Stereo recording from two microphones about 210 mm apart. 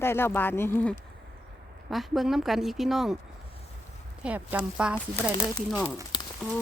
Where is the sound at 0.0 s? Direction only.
10° left (ahead or behind).